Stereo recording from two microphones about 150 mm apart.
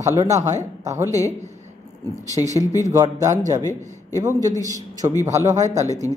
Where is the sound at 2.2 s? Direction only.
20° left (ahead or behind).